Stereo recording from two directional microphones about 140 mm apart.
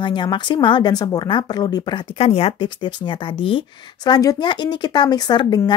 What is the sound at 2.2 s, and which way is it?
Speech, 45° left (ahead or behind).